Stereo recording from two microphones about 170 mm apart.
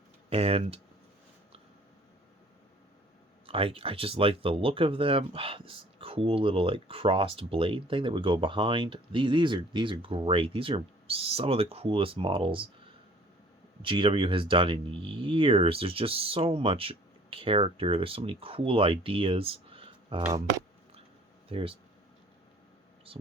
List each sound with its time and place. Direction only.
0.3 s speech: 35° right (ahead or behind)
3.4 s speech: 35° right (ahead or behind)
13.8 s speech: 30° right (ahead or behind)
21.5 s speech: 35° right (ahead or behind)